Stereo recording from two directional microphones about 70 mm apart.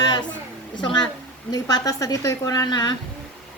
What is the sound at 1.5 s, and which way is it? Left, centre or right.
A woman's voice, left.